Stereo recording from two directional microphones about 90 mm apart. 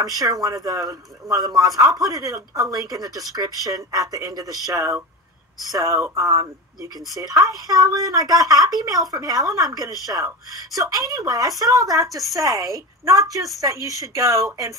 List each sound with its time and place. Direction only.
0.0 s a woman's voice: 45° right (ahead or behind)